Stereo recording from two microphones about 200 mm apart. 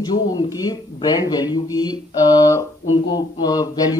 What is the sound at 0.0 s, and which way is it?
A man's voice, 20° left (ahead or behind).